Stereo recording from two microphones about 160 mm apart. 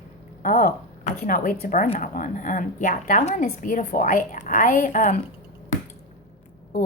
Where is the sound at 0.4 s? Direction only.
65° left (ahead or behind).